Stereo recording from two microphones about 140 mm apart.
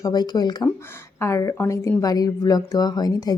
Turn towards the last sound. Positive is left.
turn(degrees=30)  # may be behind; listen again after turning